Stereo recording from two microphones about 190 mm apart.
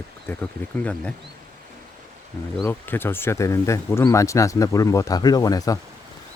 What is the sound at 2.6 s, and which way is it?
Speech, 10° left (ahead or behind).